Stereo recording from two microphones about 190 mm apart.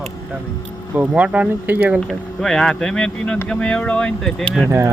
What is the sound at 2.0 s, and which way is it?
Speech, centre (ahead or behind).